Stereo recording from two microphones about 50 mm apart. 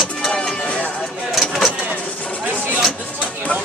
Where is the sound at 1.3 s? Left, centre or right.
Centre.